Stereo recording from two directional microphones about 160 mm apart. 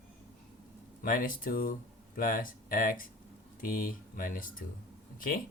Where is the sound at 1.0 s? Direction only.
60° left (ahead or behind).